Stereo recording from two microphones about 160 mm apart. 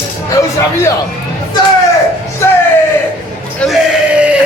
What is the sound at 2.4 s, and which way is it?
Speech, 15° left (ahead or behind).